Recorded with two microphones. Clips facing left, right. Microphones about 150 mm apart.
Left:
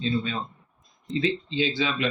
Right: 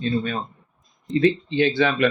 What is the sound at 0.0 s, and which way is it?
Speech, 55° right (ahead or behind).